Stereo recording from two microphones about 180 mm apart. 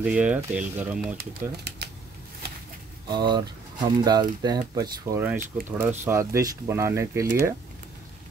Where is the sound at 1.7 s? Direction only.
70° right (ahead or behind).